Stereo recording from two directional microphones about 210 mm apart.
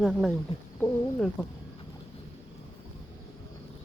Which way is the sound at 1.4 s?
5° left (ahead or behind).